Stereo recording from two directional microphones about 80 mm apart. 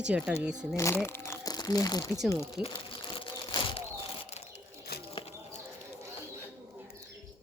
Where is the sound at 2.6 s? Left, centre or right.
Centre.